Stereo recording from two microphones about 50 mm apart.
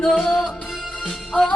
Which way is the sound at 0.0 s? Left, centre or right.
Centre.